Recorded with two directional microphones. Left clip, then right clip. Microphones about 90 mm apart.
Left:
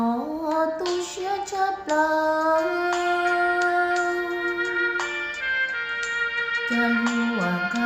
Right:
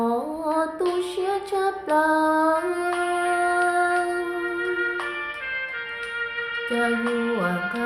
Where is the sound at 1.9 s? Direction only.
20° right (ahead or behind).